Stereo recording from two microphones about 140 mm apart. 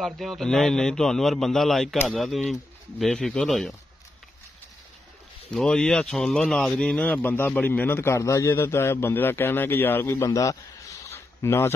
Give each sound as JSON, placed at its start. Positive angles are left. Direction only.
{"t": 0.0, "sound": "a man's voice", "side_deg": 0}
{"t": 5.5, "sound": "speech", "side_deg": 5}